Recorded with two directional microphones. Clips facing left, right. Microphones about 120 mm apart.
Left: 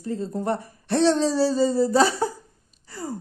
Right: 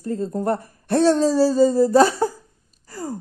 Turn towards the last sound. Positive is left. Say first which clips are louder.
# right 3 dB
turn(degrees=-45)  # may be behind; listen again after turning